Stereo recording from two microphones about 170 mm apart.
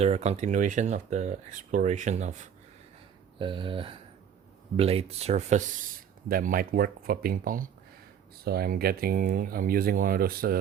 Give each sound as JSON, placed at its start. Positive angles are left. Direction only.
{"t": 0.0, "sound": "speech", "side_deg": -40}
{"t": 3.3, "sound": "speech", "side_deg": -30}